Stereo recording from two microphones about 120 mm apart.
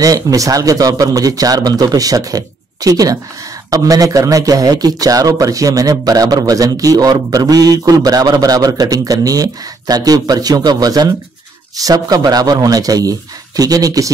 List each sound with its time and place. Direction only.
0.0 s a man's voice: 30° right (ahead or behind)